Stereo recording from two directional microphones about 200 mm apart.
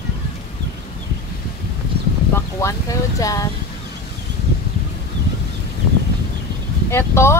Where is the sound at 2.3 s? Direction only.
15° left (ahead or behind).